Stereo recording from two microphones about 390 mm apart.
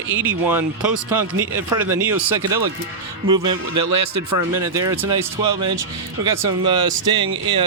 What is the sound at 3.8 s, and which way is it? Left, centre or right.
Speech, right.